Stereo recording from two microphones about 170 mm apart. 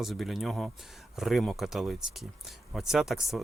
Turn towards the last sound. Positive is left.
turn(degrees=0)  # may be behind; listen again after turning